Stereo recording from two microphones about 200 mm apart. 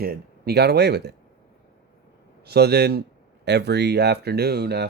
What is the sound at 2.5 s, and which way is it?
Speech, 55° right (ahead or behind).